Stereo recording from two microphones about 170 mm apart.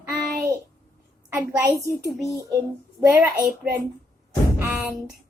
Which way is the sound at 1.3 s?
15° right (ahead or behind).